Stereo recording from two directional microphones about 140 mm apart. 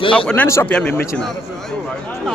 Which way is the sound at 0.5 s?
20° left (ahead or behind).